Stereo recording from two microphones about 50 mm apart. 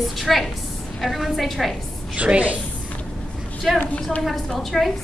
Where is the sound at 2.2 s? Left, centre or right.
Right.